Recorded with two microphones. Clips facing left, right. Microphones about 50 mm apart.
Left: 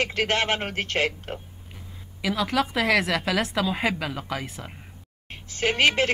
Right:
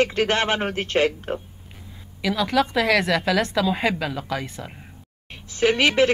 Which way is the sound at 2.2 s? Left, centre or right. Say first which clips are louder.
Right 3 dB; centre.